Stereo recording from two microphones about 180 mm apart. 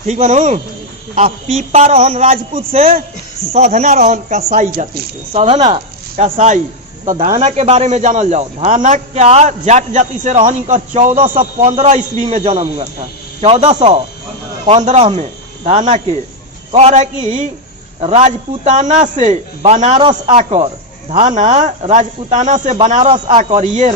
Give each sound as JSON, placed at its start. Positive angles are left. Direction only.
{"t": 0.1, "sound": "a man's voice", "side_deg": -40}
{"t": 4.7, "sound": "speech", "side_deg": -55}
{"t": 5.3, "sound": "a man's voice", "side_deg": -30}
{"t": 20.0, "sound": "a man's voice", "side_deg": -30}
{"t": 21.1, "sound": "speech", "side_deg": -40}
{"t": 23.0, "sound": "a man's voice", "side_deg": -25}
{"t": 23.4, "sound": "a man's voice", "side_deg": -40}